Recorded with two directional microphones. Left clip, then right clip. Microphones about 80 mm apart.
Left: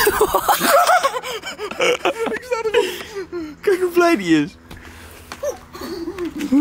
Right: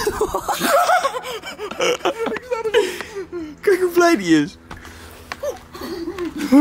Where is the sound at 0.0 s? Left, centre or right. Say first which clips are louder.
Left 5 dB; centre.